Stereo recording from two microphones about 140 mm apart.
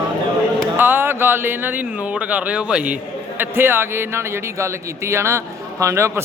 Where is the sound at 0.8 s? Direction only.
15° right (ahead or behind).